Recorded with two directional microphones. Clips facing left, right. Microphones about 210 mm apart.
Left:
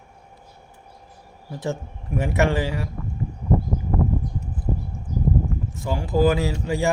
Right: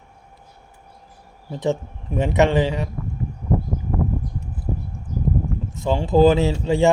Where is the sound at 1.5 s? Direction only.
20° right (ahead or behind).